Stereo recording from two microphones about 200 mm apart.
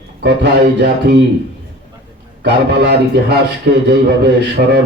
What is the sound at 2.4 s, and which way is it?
A man's voice, 55° right (ahead or behind).